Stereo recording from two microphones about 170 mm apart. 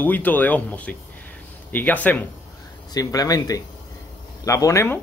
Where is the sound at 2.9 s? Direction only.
20° left (ahead or behind).